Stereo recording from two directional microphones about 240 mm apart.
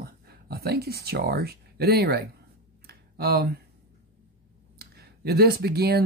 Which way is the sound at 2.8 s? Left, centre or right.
Right.